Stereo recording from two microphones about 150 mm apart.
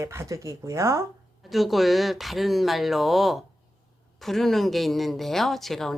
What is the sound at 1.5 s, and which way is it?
Speech, centre (ahead or behind).